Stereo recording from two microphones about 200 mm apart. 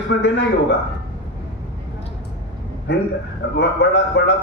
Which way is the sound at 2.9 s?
60° left (ahead or behind).